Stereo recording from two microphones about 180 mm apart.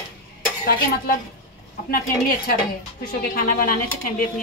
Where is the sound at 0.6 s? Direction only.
55° left (ahead or behind).